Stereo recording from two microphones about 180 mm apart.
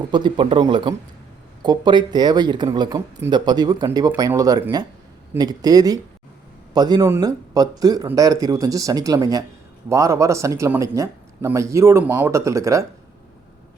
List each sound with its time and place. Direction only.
0.1 s speech: 25° right (ahead or behind)